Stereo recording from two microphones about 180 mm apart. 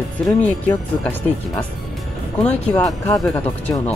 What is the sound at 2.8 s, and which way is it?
Speech, 20° left (ahead or behind).